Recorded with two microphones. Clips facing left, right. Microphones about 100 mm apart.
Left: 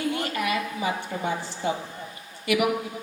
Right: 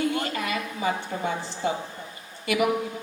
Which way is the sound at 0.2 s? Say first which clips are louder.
Left 2 dB; 30° right (ahead or behind).